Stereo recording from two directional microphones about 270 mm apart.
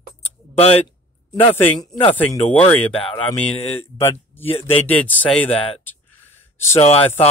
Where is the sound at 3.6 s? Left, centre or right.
Left.